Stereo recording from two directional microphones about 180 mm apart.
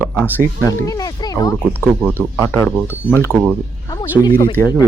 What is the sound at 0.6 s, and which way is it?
Speech, 20° left (ahead or behind).